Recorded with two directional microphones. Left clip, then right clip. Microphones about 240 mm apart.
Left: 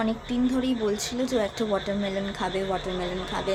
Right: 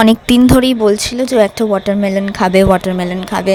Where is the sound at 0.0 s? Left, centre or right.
Right.